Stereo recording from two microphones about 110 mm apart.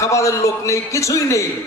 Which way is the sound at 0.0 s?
30° left (ahead or behind).